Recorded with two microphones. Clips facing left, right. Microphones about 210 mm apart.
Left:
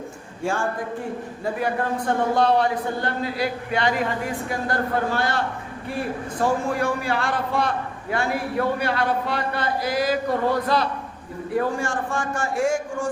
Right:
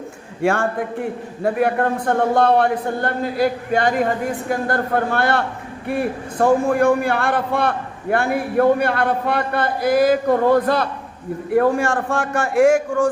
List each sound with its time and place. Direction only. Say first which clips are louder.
0.4 s a man's voice: right 6 dB; 65° right (ahead or behind)